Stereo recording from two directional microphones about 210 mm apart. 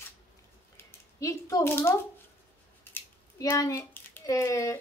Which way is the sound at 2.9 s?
10° left (ahead or behind).